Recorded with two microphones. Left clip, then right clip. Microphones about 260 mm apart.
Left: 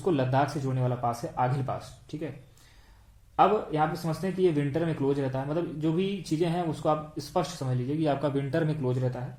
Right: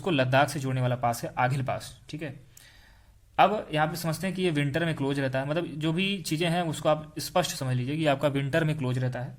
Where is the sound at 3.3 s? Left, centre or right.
Right.